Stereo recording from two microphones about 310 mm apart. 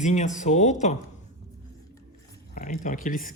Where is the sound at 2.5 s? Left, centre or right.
Left.